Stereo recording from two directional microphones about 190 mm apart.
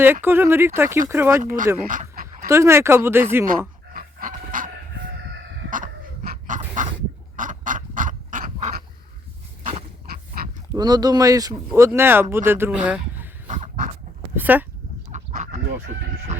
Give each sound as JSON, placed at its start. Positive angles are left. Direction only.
{"t": 0.0, "sound": "speech", "side_deg": -10}
{"t": 1.9, "sound": "goose", "side_deg": -45}
{"t": 2.5, "sound": "speech", "side_deg": -15}
{"t": 3.9, "sound": "dog", "side_deg": -45}
{"t": 5.7, "sound": "a sound", "side_deg": -45}
{"t": 10.1, "sound": "pig", "side_deg": -50}
{"t": 10.7, "sound": "speech", "side_deg": -20}
{"t": 13.5, "sound": "dog", "side_deg": -40}
{"t": 14.3, "sound": "a sound", "side_deg": -10}
{"t": 15.1, "sound": "fowl", "side_deg": -40}